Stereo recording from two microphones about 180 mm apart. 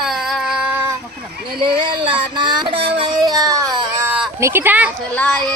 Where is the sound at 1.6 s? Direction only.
30° right (ahead or behind); by 4.9 s 10° right (ahead or behind).